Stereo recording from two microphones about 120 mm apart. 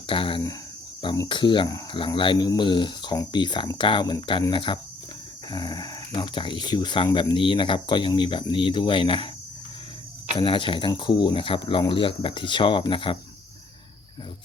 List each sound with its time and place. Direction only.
0.1 s speech: 45° left (ahead or behind)
10.3 s speech: 45° left (ahead or behind)